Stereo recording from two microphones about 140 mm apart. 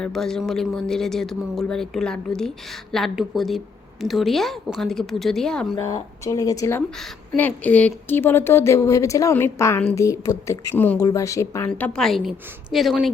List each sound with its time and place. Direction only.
0.0 s speech: 5° left (ahead or behind)
5.8 s a woman's voice: 25° left (ahead or behind)
11.0 s a woman's voice: 20° left (ahead or behind)
11.7 s speech: 5° left (ahead or behind)